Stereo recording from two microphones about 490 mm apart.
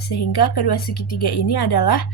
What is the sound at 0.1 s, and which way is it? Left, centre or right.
A woman's voice, left.